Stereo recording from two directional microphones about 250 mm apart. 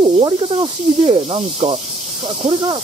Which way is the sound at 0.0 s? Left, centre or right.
Centre.